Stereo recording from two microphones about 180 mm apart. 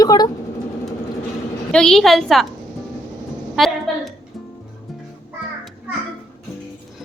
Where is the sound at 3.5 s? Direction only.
Centre (ahead or behind).